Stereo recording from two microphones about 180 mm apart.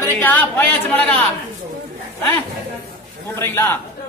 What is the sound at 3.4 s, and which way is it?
Speech, 10° left (ahead or behind).